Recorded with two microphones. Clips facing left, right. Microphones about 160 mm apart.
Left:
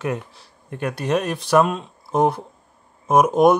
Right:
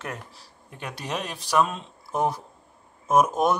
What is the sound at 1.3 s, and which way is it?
Speech, 60° left (ahead or behind).